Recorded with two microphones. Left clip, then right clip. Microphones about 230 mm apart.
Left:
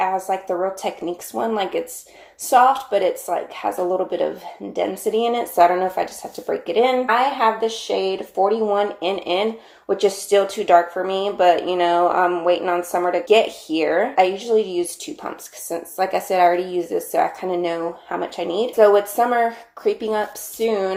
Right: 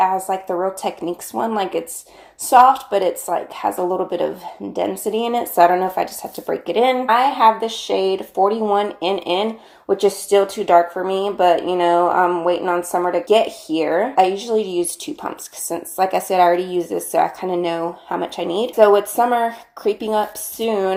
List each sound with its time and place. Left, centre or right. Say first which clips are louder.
0.0 s speech: right 3 dB; right